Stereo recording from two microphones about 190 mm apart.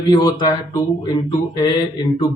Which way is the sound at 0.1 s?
20° left (ahead or behind).